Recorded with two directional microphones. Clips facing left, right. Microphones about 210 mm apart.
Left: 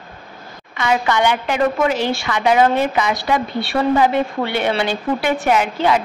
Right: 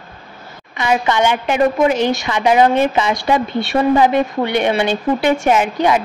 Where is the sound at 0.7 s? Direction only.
20° right (ahead or behind).